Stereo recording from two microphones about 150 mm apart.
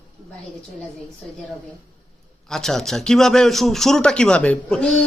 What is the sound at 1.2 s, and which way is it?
Speech, 5° left (ahead or behind).